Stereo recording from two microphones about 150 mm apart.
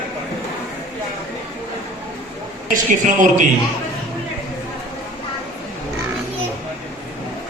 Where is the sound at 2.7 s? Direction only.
60° right (ahead or behind).